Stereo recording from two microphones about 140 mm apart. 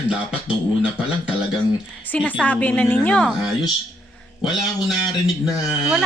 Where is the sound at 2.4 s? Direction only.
10° left (ahead or behind).